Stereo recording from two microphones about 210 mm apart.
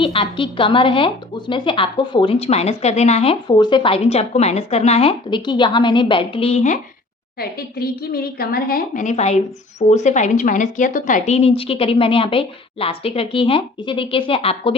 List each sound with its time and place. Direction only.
0.0 s a woman's voice: 25° left (ahead or behind)
7.3 s a woman's voice: 45° left (ahead or behind); by 14.8 s 25° left (ahead or behind)